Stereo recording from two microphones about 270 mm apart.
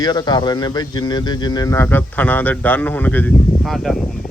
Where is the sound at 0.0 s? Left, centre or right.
Centre.